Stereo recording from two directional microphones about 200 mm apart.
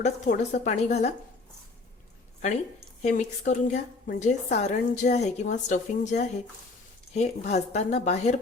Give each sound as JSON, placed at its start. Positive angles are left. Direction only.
{"t": 0.0, "sound": "a woman's voice", "side_deg": 40}
{"t": 3.0, "sound": "a woman's voice", "side_deg": 35}